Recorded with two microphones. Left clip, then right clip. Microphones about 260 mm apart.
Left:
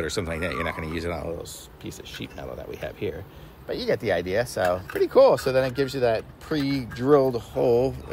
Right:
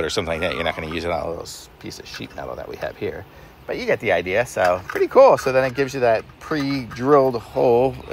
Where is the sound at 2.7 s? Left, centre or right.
Centre.